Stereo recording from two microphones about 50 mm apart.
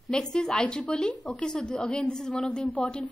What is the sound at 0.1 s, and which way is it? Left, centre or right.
A woman's voice, centre.